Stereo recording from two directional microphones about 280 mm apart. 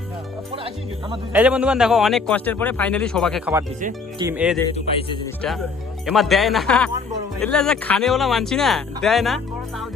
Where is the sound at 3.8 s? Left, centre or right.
Right.